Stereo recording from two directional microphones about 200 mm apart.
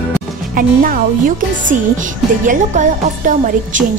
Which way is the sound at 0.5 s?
45° right (ahead or behind).